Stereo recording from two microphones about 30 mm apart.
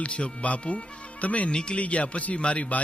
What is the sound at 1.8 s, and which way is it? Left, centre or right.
Speech, left.